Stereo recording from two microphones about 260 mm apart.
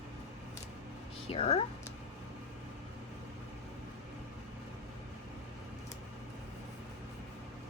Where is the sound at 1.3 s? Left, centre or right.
Left.